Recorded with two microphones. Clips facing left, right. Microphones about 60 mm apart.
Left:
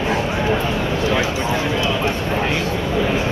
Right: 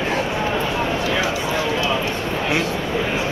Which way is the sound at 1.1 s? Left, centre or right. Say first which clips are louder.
Left 2 dB; left.